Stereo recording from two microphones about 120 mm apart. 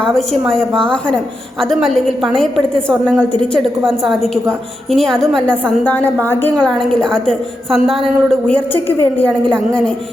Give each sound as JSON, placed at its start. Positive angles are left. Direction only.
{"t": 0.1, "sound": "a woman's voice", "side_deg": 5}
{"t": 6.8, "sound": "a woman's voice", "side_deg": 5}